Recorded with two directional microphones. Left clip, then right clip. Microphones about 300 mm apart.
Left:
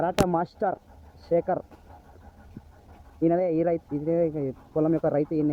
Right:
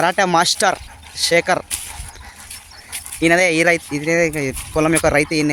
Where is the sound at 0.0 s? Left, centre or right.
Left.